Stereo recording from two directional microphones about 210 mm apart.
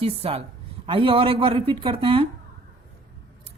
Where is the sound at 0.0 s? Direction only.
30° right (ahead or behind).